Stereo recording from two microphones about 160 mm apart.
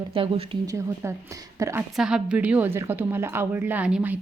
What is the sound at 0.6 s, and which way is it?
A woman's voice, 20° right (ahead or behind).